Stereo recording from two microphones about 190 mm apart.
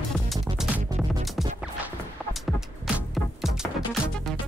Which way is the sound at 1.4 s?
Centre (ahead or behind).